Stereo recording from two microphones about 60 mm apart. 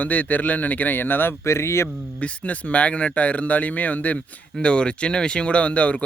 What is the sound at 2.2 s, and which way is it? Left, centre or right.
Speech, left.